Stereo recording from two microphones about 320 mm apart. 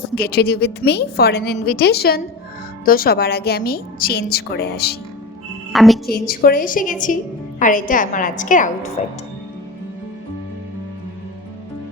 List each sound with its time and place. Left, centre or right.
0.2 s a woman's voice: left
5.7 s a woman's voice: centre
6.1 s a woman's voice: left